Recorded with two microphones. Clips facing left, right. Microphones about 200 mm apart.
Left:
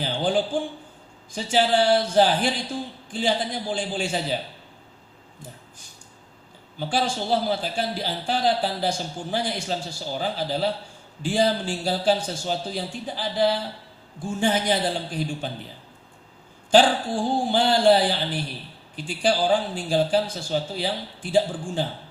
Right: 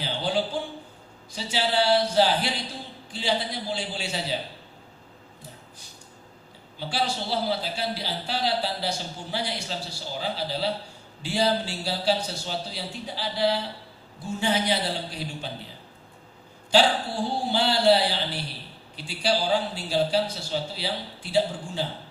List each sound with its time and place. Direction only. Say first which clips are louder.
0.0 s a sound: left 4 dB; 50° left (ahead or behind)
1.3 s a man's voice: left 6 dB; 50° left (ahead or behind)
6.7 s a man's voice: left 3 dB; 50° left (ahead or behind)
16.7 s a man's voice: left 4 dB; 50° left (ahead or behind)